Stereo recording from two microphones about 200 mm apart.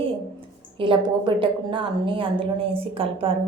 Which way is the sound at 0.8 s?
25° right (ahead or behind).